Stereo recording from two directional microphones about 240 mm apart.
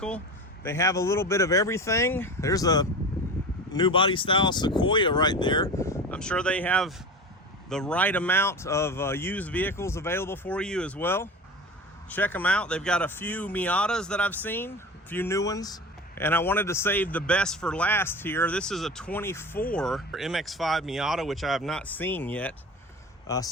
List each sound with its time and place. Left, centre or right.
0.6 s a man's voice: centre